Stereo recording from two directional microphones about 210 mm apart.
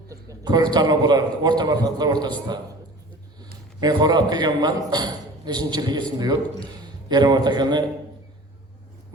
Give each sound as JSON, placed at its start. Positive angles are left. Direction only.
{"t": 0.1, "sound": "a man's voice", "side_deg": -15}
{"t": 3.8, "sound": "a man's voice", "side_deg": -20}